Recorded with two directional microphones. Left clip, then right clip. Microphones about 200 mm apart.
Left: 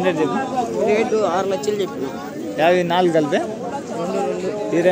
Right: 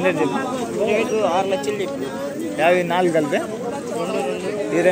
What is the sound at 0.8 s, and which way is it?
Speech, 60° left (ahead or behind).